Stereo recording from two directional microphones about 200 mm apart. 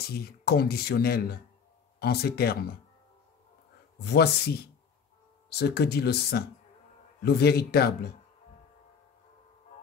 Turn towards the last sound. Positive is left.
turn(degrees=50)  # may be behind; listen again after turning